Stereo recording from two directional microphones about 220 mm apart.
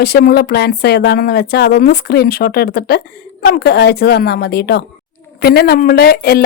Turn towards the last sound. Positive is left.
turn(degrees=45)  # may be behind; listen again after turning